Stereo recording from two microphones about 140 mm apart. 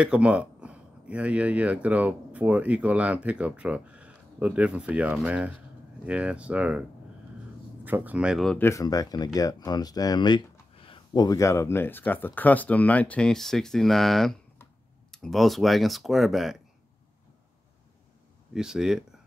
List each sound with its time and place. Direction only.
0.0 s speech: 10° right (ahead or behind)
8.5 s speech: 20° left (ahead or behind); by 16.5 s centre (ahead or behind)
18.5 s speech: 5° right (ahead or behind)